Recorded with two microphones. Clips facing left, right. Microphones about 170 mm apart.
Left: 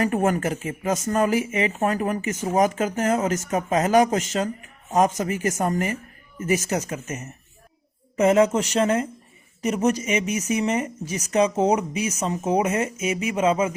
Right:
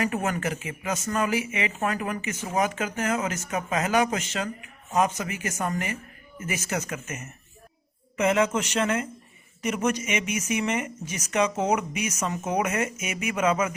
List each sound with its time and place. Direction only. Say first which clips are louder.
0.0 s speech: left 5 dB; 45° left (ahead or behind); by 13.7 s 25° left (ahead or behind)